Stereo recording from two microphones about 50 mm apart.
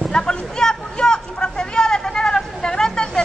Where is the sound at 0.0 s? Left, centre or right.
Centre.